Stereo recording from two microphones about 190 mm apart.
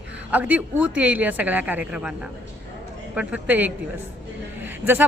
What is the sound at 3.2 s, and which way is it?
Speech, 5° right (ahead or behind).